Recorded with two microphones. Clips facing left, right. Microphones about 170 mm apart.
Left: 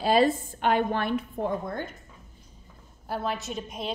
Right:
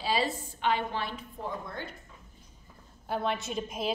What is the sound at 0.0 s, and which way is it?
A woman's voice, 50° left (ahead or behind).